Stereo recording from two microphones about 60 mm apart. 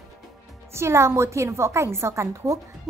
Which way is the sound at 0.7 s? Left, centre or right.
Right.